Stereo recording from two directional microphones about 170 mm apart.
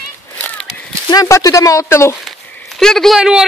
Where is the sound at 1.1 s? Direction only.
20° left (ahead or behind).